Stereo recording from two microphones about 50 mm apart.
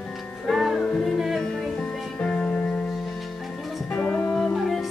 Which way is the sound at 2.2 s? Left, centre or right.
Centre.